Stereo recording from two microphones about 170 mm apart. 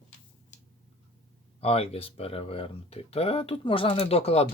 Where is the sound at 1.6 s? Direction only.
35° left (ahead or behind).